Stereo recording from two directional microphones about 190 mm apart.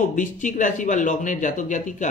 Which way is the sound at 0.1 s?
40° left (ahead or behind).